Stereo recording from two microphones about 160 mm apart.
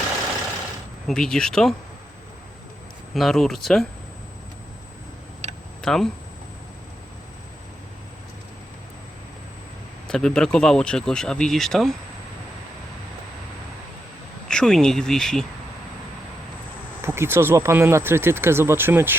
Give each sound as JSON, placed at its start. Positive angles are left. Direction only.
{"t": 1.0, "sound": "speech", "side_deg": 5}
{"t": 3.2, "sound": "speech", "side_deg": 0}
{"t": 5.4, "sound": "tick-tock", "side_deg": -45}
{"t": 5.8, "sound": "speech", "side_deg": 5}
{"t": 10.1, "sound": "speech", "side_deg": 5}
{"t": 14.4, "sound": "speech", "side_deg": 5}
{"t": 17.1, "sound": "speech", "side_deg": -15}